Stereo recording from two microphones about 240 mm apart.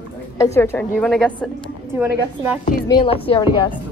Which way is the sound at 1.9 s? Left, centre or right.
Centre.